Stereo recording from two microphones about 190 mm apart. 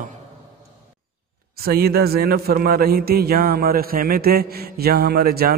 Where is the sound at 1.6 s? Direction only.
55° right (ahead or behind).